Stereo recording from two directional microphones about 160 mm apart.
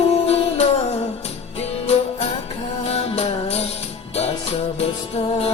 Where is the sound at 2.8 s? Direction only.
40° left (ahead or behind).